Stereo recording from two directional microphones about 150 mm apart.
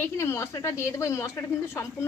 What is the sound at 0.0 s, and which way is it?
Speech, 15° left (ahead or behind).